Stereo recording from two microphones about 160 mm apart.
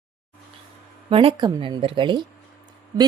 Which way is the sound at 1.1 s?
35° right (ahead or behind).